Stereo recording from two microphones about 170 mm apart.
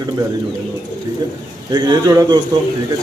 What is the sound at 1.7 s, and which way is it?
Speech, 25° right (ahead or behind).